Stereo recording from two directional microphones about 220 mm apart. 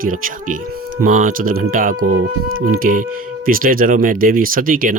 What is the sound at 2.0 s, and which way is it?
Speech, 90° right.